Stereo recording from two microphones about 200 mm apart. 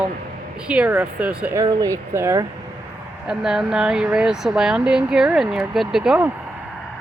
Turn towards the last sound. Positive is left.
turn(degrees=-5)  # may be behind; listen again after turning